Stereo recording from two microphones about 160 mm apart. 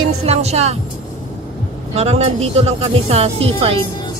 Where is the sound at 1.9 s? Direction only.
40° right (ahead or behind).